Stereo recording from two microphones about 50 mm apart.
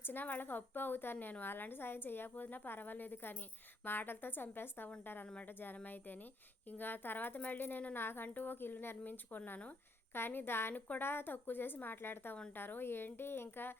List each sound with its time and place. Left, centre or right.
0.0 s a woman's voice: left
5.2 s a woman's voice: left